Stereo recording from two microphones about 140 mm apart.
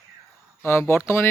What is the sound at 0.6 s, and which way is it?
Speech, 20° left (ahead or behind).